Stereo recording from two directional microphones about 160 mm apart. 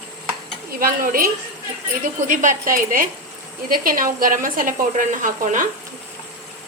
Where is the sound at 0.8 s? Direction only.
65° right (ahead or behind).